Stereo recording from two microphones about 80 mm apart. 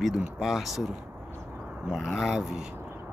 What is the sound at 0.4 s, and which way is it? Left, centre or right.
Speech, centre.